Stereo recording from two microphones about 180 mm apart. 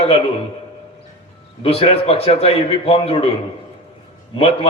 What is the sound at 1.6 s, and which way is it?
A man's voice, 35° left (ahead or behind).